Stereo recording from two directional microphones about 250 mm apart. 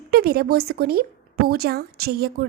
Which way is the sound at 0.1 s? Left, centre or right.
Right.